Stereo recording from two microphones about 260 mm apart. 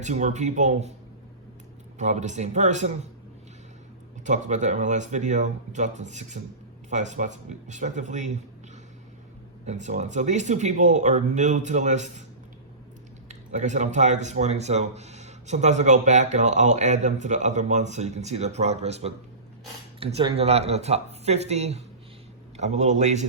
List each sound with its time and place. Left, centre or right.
0.0 s speech: right
2.0 s speech: right
4.3 s speech: right
13.2 s speech: right